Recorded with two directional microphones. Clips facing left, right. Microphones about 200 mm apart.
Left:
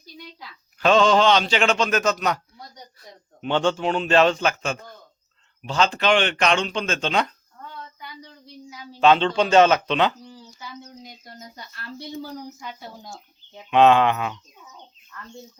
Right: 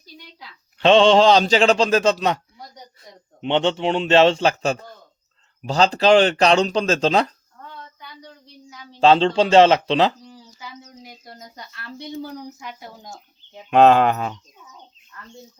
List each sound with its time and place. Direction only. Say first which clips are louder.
0.8 s speech: right 4 dB; 25° right (ahead or behind)
3.4 s a man's voice: right 2 dB; 20° right (ahead or behind)
8.7 s a sound: left 1 dB; 5° left (ahead or behind)
9.0 s a man's voice: right 3 dB; 30° right (ahead or behind)
13.7 s speech: right 2 dB; 40° right (ahead or behind)